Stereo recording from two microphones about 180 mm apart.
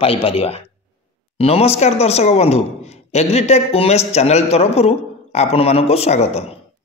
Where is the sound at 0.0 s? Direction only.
30° left (ahead or behind).